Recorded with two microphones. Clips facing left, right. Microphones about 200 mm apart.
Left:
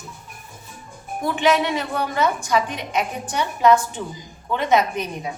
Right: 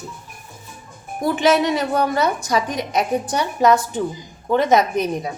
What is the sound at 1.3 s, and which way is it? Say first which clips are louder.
A woman's voice: right 2 dB; 40° right (ahead or behind).